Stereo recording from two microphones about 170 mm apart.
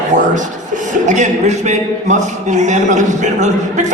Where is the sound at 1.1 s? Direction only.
45° right (ahead or behind).